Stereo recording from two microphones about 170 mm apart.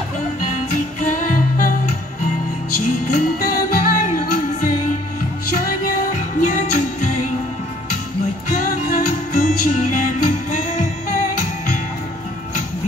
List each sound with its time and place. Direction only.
1.0 s music: 50° left (ahead or behind)
3.1 s music: 50° left (ahead or behind)
6.4 s music: 50° left (ahead or behind)
8.5 s music: 55° left (ahead or behind)